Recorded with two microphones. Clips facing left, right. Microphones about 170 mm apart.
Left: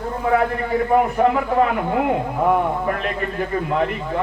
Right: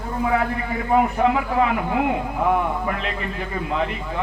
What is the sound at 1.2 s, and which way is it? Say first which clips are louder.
A man's voice: left 2 dB; 45° left (ahead or behind).